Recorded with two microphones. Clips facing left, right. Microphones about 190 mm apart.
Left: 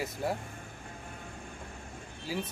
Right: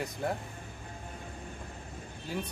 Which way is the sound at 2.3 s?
5° left (ahead or behind).